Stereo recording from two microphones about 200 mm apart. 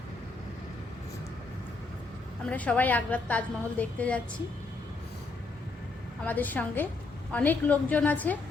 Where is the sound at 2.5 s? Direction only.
5° left (ahead or behind).